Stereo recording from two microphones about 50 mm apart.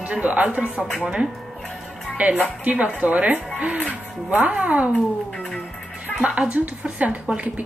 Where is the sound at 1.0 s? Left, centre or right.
Centre.